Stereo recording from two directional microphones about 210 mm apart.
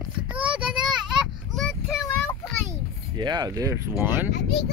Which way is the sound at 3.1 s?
20° right (ahead or behind).